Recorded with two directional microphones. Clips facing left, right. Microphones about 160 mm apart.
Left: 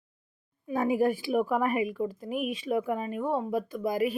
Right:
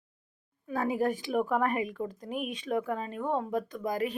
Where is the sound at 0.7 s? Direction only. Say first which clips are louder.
Left 3 dB; 15° left (ahead or behind).